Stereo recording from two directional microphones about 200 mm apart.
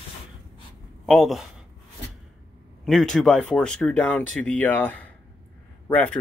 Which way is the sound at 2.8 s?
Centre (ahead or behind).